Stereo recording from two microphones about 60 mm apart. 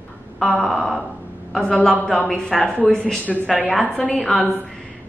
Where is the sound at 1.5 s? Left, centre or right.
Centre.